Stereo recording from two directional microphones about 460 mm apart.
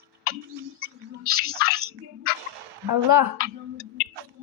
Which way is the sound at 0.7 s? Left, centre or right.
Right.